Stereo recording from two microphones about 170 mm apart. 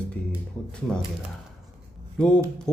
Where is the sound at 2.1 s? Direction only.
5° left (ahead or behind).